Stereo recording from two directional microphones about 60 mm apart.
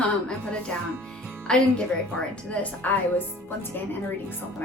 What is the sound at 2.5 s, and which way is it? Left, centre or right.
Speech, left.